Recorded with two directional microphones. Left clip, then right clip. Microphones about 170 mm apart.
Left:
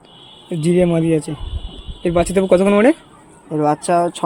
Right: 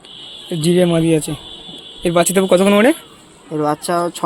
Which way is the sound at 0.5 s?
10° left (ahead or behind).